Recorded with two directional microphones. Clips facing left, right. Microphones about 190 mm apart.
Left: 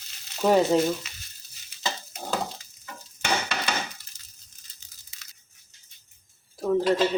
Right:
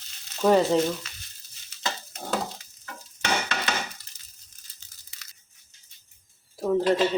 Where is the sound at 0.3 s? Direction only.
5° left (ahead or behind).